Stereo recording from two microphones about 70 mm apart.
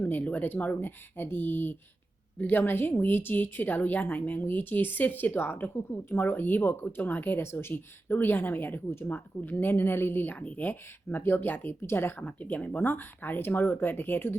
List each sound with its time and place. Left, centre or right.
0.1 s a woman's voice: left
12.4 s a woman's voice: left